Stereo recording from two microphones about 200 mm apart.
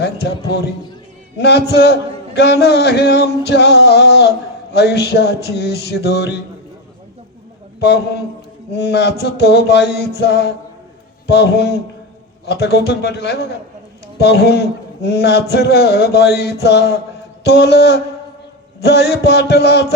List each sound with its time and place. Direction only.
0.0 s a man's voice: 55° left (ahead or behind)
7.8 s a man's voice: 55° left (ahead or behind)